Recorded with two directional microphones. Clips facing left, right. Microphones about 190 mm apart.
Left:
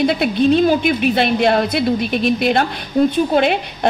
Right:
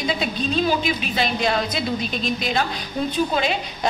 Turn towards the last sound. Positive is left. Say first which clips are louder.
# left 7 dB
turn(degrees=60)  # may be behind; listen again after turning